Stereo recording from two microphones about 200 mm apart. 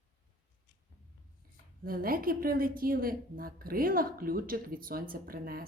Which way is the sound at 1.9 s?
45° right (ahead or behind).